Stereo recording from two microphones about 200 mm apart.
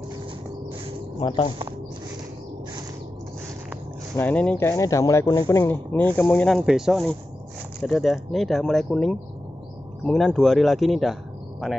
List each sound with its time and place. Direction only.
1.2 s speech: 25° left (ahead or behind)
4.2 s speech: 5° left (ahead or behind)